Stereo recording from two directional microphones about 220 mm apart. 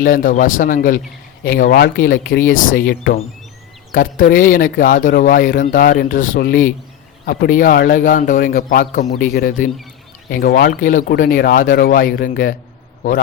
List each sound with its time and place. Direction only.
0.0 s speech: 40° left (ahead or behind)